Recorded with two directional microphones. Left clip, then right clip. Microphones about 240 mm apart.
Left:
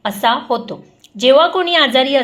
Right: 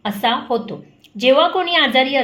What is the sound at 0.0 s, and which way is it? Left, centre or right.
A woman's voice, centre.